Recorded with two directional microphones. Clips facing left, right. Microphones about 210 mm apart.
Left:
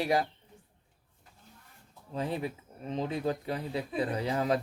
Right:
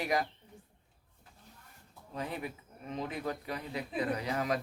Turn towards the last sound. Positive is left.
turn(degrees=30)  # may be behind; listen again after turning